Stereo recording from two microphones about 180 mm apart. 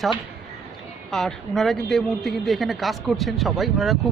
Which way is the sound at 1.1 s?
Centre (ahead or behind).